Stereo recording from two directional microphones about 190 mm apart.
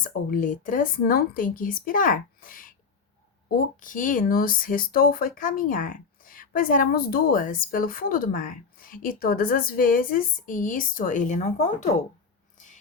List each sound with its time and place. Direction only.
0.0 s speech: 45° left (ahead or behind)